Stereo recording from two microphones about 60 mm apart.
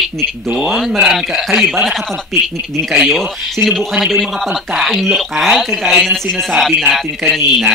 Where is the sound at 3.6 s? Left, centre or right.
Right.